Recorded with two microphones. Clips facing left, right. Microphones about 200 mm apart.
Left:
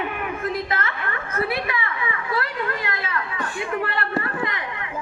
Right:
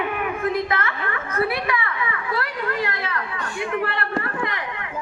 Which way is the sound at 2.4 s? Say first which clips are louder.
Right 2 dB; 30° right (ahead or behind).